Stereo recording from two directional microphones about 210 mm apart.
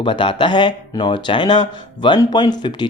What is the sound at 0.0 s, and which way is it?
Speech, 25° left (ahead or behind).